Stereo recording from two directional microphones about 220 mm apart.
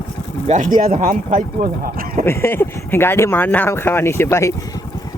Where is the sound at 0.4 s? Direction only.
35° right (ahead or behind).